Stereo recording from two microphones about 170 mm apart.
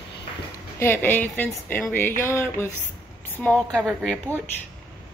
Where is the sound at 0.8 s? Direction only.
10° left (ahead or behind).